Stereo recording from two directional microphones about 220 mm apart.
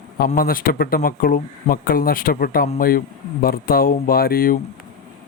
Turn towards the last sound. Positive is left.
turn(degrees=40)  # may be behind; listen again after turning